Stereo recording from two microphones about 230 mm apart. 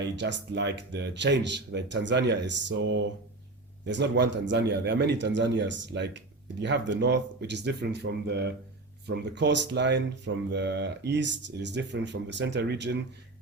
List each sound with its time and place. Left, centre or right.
0.0 s speech: right